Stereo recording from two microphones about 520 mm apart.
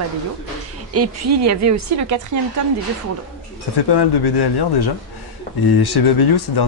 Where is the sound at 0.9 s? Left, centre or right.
Right.